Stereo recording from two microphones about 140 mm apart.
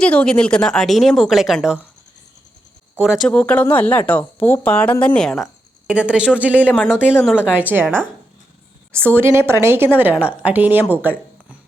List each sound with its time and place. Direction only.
0.0 s a woman's voice: 5° left (ahead or behind)
2.9 s speech: 5° right (ahead or behind)
3.2 s a woman's voice: 10° left (ahead or behind)
5.9 s a woman's voice: 10° right (ahead or behind)
6.7 s a woman's voice: 15° left (ahead or behind)
7.3 s a woman's voice: 10° right (ahead or behind)
11.0 s a sound: 10° right (ahead or behind)